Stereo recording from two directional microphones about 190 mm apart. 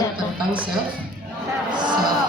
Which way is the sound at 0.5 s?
5° right (ahead or behind).